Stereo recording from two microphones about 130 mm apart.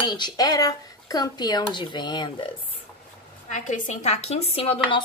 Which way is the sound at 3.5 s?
75° left (ahead or behind).